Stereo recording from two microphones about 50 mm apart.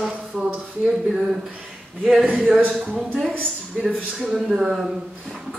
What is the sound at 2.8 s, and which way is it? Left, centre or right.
Speech, right.